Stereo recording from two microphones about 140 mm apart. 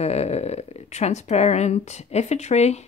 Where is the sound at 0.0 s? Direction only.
50° left (ahead or behind).